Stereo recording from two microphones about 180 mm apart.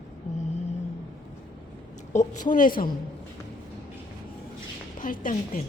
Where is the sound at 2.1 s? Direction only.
45° left (ahead or behind).